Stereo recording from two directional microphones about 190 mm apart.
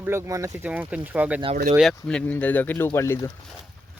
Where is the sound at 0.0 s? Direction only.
15° right (ahead or behind).